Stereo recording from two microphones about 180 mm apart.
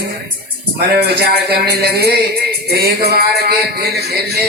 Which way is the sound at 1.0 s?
60° right (ahead or behind).